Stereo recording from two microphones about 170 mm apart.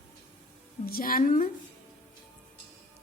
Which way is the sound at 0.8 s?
60° left (ahead or behind).